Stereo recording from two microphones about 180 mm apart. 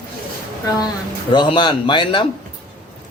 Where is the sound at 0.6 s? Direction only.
20° left (ahead or behind).